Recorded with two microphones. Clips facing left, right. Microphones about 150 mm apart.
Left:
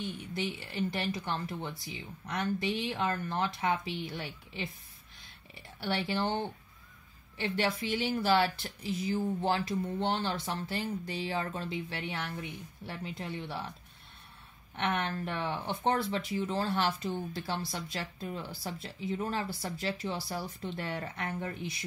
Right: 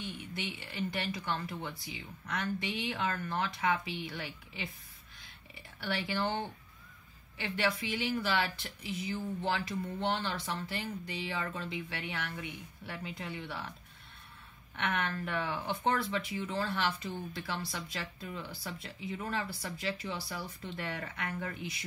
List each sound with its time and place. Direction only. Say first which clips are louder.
0.7 s speech: left 2 dB; 35° left (ahead or behind)
5.8 s speech: left 2 dB; 35° left (ahead or behind)
14.8 s speech: left 2 dB; 30° left (ahead or behind)